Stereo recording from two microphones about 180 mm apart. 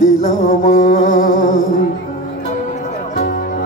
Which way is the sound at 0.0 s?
45° left (ahead or behind).